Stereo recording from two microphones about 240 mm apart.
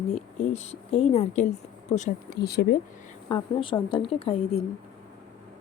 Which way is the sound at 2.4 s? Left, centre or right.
Left.